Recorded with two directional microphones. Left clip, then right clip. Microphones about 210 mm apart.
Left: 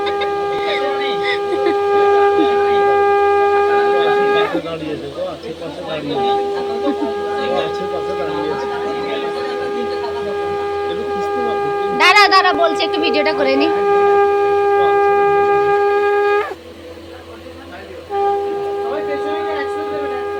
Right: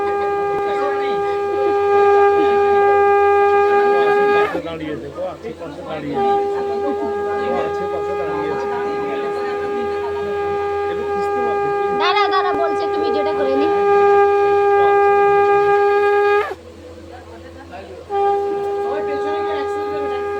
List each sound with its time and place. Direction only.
0.3 s shofar: centre (ahead or behind)
10.3 s shofar: centre (ahead or behind)
12.9 s a sound: centre (ahead or behind)
13.1 s shofar: 10° left (ahead or behind)
18.2 s music: centre (ahead or behind)